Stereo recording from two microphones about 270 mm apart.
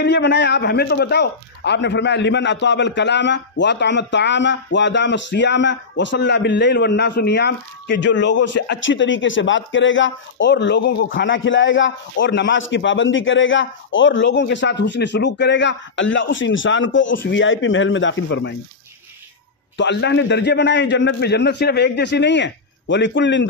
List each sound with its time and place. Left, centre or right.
0.0 s a man's voice: left
19.8 s a man's voice: left